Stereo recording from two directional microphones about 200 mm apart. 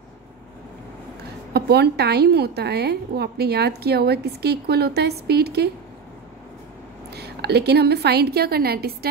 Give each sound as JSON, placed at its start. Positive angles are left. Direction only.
{"t": 1.5, "sound": "a woman's voice", "side_deg": -55}
{"t": 7.2, "sound": "a woman's voice", "side_deg": -55}